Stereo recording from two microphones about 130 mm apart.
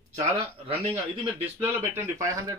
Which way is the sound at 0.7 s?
50° right (ahead or behind).